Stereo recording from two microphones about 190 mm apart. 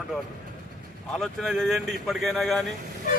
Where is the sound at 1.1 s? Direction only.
Centre (ahead or behind).